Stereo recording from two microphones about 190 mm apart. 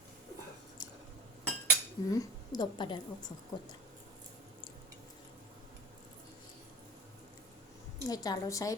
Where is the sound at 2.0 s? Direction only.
20° left (ahead or behind).